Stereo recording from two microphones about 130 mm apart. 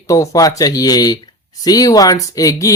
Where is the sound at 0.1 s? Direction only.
25° left (ahead or behind).